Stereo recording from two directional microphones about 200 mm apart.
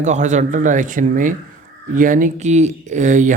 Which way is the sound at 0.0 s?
35° right (ahead or behind).